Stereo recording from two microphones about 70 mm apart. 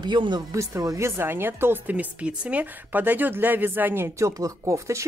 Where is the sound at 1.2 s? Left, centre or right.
Right.